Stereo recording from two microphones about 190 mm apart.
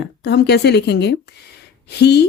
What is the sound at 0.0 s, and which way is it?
A woman's voice, 60° left (ahead or behind).